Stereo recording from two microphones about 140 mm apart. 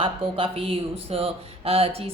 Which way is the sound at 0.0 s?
40° right (ahead or behind).